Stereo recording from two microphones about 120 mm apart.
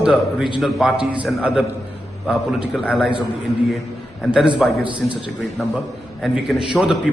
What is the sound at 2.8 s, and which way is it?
Speech, 5° right (ahead or behind).